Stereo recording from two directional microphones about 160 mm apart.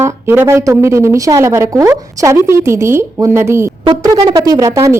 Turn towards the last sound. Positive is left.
turn(degrees=-20)  # may be behind; listen again after turning